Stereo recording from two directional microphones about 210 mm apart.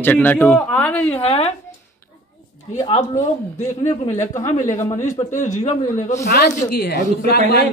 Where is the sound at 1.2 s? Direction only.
30° left (ahead or behind).